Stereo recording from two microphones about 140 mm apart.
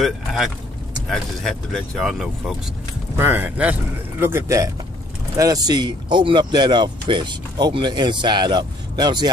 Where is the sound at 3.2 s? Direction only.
15° right (ahead or behind).